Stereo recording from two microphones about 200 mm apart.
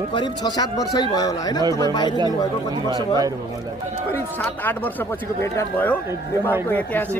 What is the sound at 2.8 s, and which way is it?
Speech, 20° right (ahead or behind).